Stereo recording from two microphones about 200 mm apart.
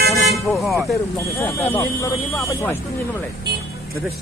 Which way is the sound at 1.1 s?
15° left (ahead or behind).